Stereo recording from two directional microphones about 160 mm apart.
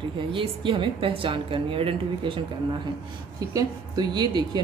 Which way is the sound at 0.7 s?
30° right (ahead or behind).